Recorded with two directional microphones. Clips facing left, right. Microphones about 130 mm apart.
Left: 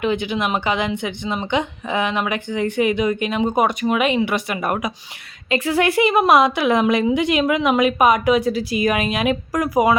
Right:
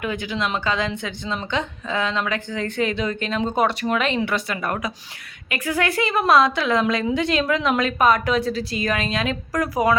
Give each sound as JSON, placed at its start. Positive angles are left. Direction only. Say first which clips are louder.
{"t": 0.0, "sound": "a woman's voice", "louder": "left 5 dB", "side_deg": 20}